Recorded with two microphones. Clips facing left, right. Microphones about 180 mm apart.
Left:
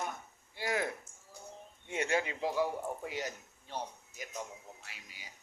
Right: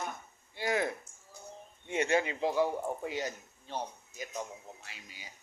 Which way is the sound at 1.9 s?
20° right (ahead or behind).